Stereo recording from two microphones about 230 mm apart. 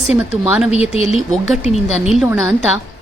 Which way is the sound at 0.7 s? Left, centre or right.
Left.